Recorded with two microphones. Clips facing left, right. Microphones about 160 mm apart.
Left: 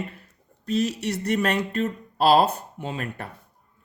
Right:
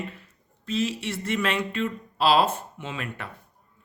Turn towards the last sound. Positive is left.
turn(degrees=40)  # may be behind; listen again after turning